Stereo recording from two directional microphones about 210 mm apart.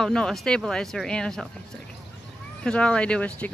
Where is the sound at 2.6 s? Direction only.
5° left (ahead or behind).